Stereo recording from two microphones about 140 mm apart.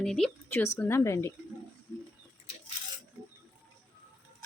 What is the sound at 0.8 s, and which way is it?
Speech, 20° left (ahead or behind).